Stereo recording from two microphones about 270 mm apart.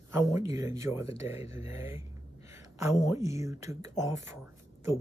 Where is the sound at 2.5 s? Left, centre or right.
Centre.